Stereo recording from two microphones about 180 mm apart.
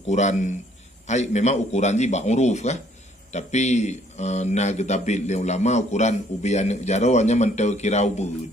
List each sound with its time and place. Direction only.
0.0 s a man's voice: 40° left (ahead or behind)